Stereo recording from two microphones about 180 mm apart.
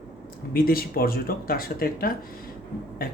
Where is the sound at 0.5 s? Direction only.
55° left (ahead or behind).